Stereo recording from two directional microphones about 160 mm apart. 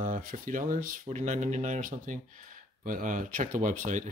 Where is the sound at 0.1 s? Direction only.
55° right (ahead or behind).